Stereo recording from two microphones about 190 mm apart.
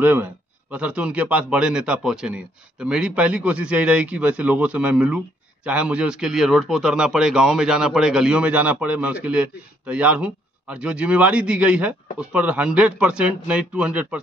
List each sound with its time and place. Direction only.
0.0 s speech: 10° right (ahead or behind)